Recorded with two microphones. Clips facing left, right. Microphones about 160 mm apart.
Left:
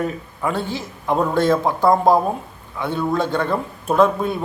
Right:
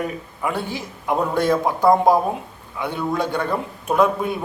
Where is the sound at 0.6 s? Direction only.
15° right (ahead or behind).